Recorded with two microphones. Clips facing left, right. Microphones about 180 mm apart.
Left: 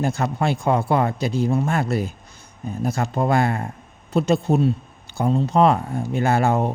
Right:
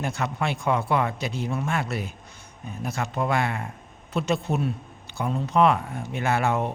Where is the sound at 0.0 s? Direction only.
35° left (ahead or behind).